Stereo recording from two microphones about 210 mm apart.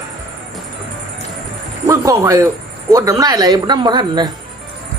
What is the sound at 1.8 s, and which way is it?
Speech, 15° right (ahead or behind).